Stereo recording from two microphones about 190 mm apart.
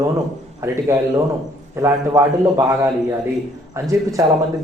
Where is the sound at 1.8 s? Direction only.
15° right (ahead or behind).